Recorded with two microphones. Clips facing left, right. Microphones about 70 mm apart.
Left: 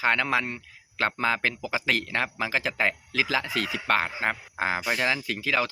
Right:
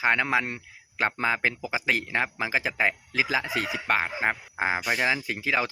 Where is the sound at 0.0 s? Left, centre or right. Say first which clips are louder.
Right 1 dB; centre.